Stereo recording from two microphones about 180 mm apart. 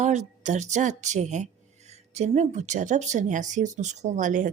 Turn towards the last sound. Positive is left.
turn(degrees=-45)  # may be behind; listen again after turning